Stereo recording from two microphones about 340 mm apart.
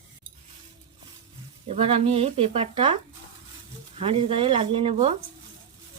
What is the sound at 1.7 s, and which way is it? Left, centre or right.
Speech, centre.